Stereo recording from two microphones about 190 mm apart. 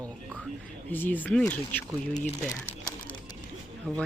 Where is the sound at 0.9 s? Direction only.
10° left (ahead or behind).